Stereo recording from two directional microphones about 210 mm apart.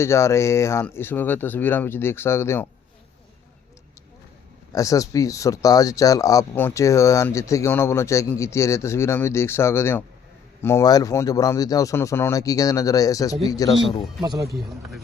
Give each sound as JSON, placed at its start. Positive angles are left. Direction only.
{"t": 0.0, "sound": "speech", "side_deg": 15}
{"t": 4.7, "sound": "speech", "side_deg": 15}
{"t": 14.2, "sound": "speech", "side_deg": -15}
{"t": 14.5, "sound": "a man's voice", "side_deg": 0}